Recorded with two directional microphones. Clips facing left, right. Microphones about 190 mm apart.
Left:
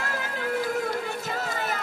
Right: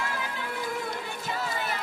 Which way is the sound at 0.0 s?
40° left (ahead or behind).